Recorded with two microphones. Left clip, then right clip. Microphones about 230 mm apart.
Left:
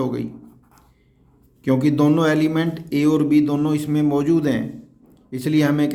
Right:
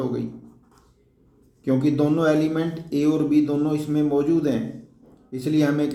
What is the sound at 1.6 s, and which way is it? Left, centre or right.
A man's voice, left.